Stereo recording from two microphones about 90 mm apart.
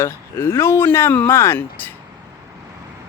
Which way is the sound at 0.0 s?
25° left (ahead or behind).